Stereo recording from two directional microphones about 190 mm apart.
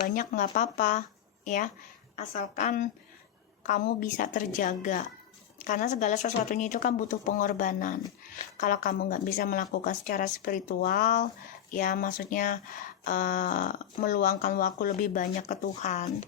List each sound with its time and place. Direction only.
0.1 s speech: 45° left (ahead or behind)